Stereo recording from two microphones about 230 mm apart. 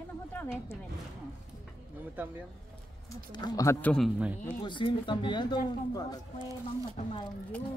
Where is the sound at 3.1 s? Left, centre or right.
Centre.